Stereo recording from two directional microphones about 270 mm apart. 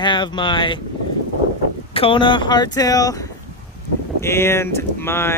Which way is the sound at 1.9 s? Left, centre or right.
Centre.